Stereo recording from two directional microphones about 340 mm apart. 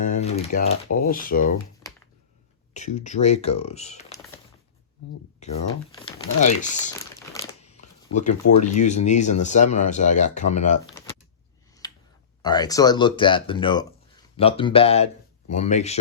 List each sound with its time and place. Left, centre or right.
0.0 s speech: centre
2.7 s speech: left
5.4 s speech: centre
7.4 s crumpling: centre
8.1 s speech: left
11.8 s clicking: centre
12.4 s speech: centre